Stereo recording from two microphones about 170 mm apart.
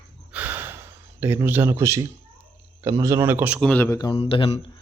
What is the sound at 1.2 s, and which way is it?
Speech, 15° right (ahead or behind).